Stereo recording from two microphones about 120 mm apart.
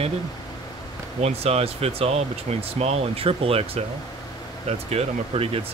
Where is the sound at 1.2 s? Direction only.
60° right (ahead or behind).